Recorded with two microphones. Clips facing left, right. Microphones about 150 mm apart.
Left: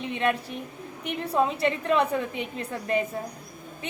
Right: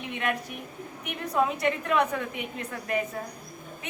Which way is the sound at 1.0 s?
30° left (ahead or behind).